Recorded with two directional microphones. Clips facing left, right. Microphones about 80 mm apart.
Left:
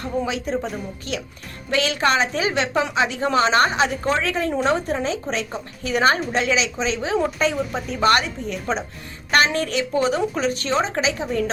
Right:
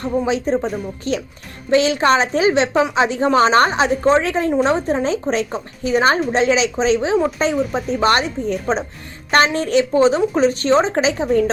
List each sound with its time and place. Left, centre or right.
0.0 s a woman's voice: right